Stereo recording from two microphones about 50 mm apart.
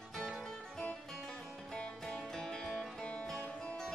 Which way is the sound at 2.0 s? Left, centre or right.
Centre.